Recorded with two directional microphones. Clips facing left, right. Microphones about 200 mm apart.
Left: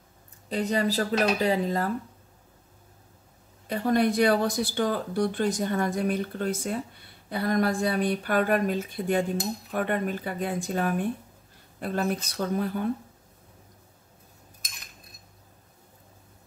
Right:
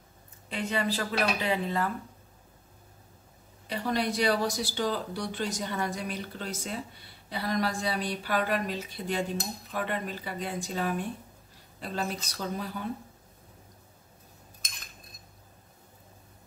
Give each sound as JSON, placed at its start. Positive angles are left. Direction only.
{"t": 0.5, "sound": "speech", "side_deg": 40}
{"t": 3.6, "sound": "speech", "side_deg": 50}